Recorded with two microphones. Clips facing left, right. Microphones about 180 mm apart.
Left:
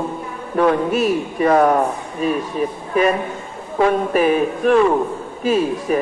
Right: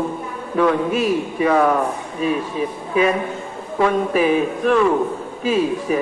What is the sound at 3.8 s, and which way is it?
A man's voice, 45° left (ahead or behind).